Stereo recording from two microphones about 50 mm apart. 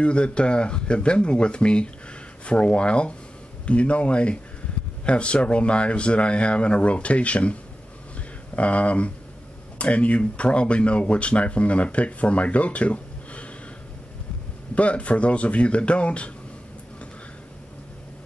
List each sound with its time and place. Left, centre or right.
0.0 s speech: left
8.5 s speech: left
14.8 s speech: left